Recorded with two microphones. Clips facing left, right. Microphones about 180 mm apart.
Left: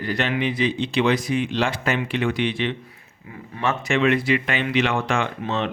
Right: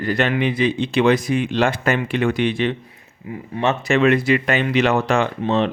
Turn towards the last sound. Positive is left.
turn(degrees=-35)  # may be behind; listen again after turning